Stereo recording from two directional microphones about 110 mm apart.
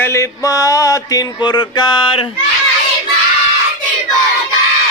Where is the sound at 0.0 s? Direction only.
25° left (ahead or behind); by 2.3 s 50° left (ahead or behind).